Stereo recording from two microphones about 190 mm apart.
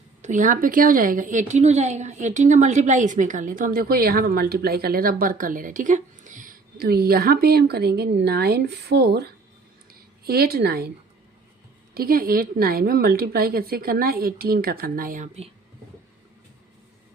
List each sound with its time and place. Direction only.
0.2 s a woman's voice: 40° right (ahead or behind); by 9.2 s 60° right (ahead or behind)
10.2 s a woman's voice: 55° right (ahead or behind)
11.9 s a woman's voice: 50° right (ahead or behind)